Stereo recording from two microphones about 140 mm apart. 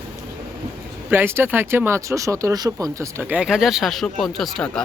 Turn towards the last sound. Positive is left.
turn(degrees=5)  # may be behind; listen again after turning